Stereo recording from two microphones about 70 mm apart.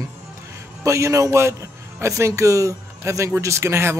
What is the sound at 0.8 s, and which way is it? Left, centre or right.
A man's voice, right.